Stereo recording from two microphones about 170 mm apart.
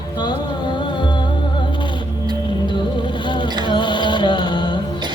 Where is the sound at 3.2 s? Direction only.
30° left (ahead or behind).